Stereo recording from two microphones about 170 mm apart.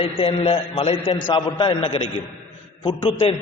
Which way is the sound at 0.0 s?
35° left (ahead or behind).